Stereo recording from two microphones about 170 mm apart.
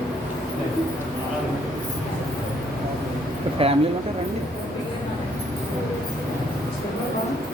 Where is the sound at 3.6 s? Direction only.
35° right (ahead or behind).